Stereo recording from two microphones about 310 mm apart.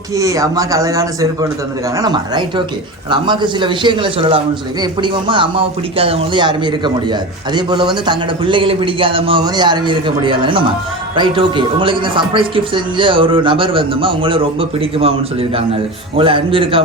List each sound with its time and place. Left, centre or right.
0.2 s a man's voice: centre